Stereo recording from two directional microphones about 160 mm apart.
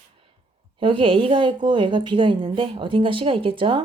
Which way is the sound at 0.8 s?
30° right (ahead or behind).